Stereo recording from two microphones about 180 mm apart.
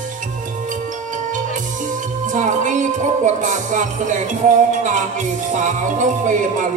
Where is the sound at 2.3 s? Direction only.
45° right (ahead or behind).